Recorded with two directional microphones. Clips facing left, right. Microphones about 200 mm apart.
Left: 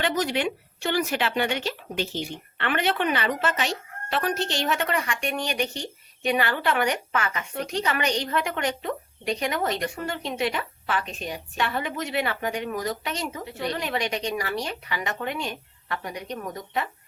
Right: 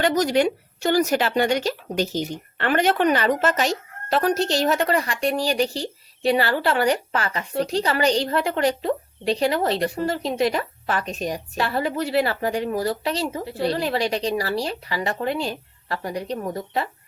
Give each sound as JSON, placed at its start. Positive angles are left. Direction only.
{"t": 0.0, "sound": "speech", "side_deg": -40}